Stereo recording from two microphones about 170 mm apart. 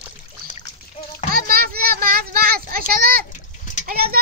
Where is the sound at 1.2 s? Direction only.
60° right (ahead or behind).